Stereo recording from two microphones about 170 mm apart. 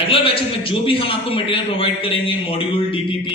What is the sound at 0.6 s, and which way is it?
A man's voice, 30° left (ahead or behind).